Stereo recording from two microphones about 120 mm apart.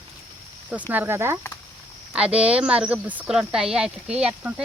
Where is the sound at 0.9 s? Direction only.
15° right (ahead or behind).